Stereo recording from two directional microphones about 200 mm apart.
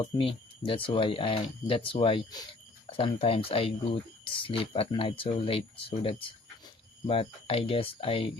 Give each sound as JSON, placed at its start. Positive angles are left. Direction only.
{"t": 0.0, "sound": "speech", "side_deg": 25}